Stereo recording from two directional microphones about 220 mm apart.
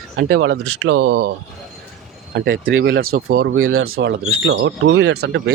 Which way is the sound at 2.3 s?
50° right (ahead or behind).